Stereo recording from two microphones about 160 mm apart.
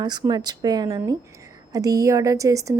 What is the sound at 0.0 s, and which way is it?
A woman's voice, 25° right (ahead or behind).